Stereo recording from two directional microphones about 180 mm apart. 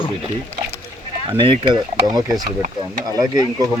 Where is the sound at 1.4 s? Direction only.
30° right (ahead or behind).